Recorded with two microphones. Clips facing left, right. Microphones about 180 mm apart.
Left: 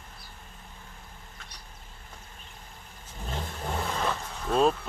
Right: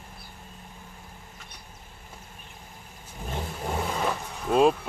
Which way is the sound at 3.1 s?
10° right (ahead or behind).